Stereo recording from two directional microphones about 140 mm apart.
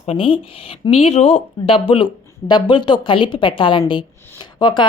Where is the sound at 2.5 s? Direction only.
35° left (ahead or behind).